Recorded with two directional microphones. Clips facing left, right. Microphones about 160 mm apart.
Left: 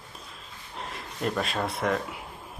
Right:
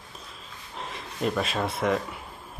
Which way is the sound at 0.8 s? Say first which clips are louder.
Right 2 dB; centre (ahead or behind).